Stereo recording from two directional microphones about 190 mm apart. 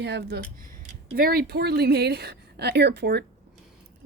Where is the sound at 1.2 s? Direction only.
50° right (ahead or behind).